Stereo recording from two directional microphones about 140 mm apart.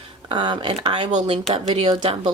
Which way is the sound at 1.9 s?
35° right (ahead or behind).